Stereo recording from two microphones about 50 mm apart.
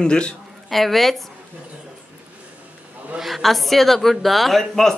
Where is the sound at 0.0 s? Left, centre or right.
Centre.